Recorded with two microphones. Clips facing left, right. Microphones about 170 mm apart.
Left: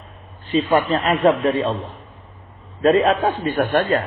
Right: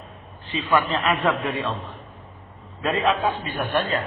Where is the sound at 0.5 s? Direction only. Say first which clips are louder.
Left 5 dB; 35° left (ahead or behind).